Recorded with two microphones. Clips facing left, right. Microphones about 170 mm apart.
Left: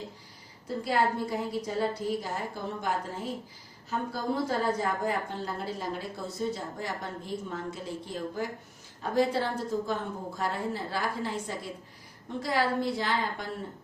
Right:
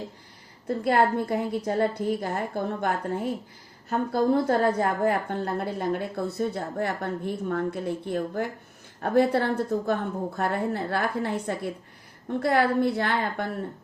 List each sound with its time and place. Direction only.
0.9 s a woman's voice: 60° right (ahead or behind)